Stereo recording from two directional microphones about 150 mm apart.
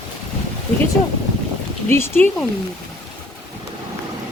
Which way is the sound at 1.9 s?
15° left (ahead or behind).